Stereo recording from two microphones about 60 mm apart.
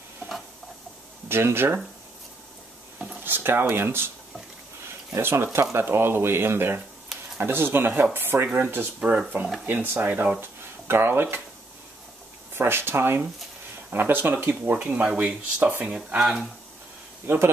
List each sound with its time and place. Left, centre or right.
1.3 s speech: right
3.3 s speech: right
5.2 s speech: right
9.7 s speech: right
10.4 s speech: right
12.5 s speech: right
16.2 s speech: centre